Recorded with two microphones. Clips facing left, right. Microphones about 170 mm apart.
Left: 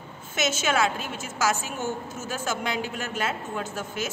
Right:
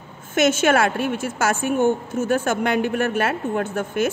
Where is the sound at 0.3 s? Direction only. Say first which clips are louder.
Right 9 dB; 55° right (ahead or behind).